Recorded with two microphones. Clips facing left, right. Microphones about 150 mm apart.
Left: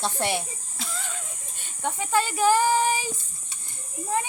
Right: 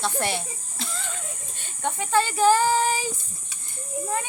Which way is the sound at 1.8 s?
10° left (ahead or behind).